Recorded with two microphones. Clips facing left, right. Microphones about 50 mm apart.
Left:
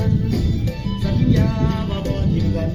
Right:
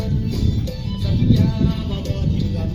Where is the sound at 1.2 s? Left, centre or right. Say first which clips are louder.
Right 1 dB; left.